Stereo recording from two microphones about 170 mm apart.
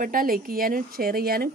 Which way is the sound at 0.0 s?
55° right (ahead or behind).